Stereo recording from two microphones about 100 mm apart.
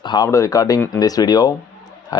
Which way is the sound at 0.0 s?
50° left (ahead or behind).